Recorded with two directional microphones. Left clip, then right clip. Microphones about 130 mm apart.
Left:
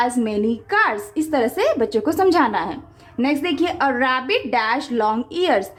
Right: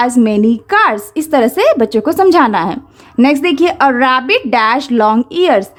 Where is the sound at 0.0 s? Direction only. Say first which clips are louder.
Right 8 dB; 45° right (ahead or behind).